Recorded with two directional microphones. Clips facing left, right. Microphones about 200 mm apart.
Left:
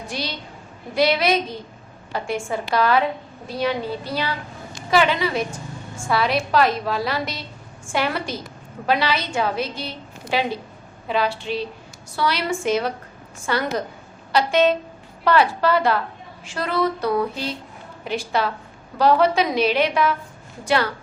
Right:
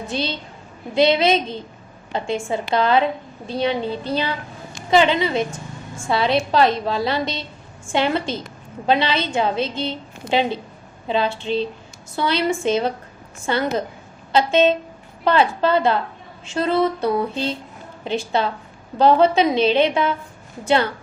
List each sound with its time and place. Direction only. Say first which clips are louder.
0.1 s a woman's voice: right 5 dB; 25° right (ahead or behind)
4.9 s a woman's voice: right 3 dB; 25° right (ahead or behind)